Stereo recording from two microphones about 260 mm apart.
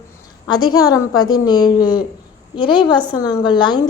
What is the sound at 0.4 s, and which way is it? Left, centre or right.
A woman's voice, centre.